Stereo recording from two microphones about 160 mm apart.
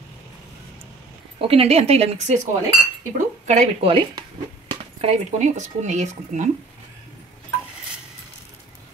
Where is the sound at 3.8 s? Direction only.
30° right (ahead or behind); by 6.4 s 50° right (ahead or behind).